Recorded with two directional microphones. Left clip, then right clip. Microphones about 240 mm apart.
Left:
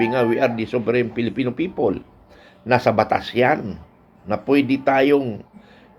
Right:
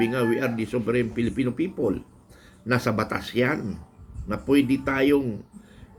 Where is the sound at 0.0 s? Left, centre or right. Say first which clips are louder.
Left 6 dB; centre.